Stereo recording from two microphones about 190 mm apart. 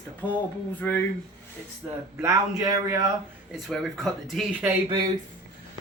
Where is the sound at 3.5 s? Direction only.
Centre (ahead or behind).